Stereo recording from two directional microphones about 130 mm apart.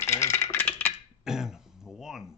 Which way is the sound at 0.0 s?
20° left (ahead or behind).